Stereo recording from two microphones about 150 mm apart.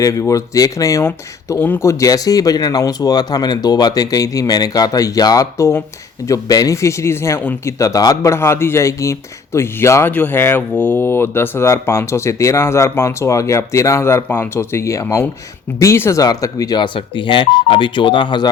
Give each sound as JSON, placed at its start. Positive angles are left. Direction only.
{"t": 0.0, "sound": "speech", "side_deg": 20}